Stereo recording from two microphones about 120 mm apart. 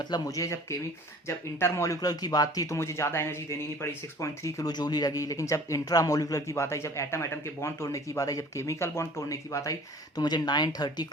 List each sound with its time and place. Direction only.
0.0 s speech: 30° left (ahead or behind)